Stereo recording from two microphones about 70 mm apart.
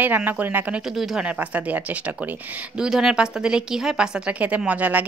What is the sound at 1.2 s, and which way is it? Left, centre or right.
A woman's voice, right.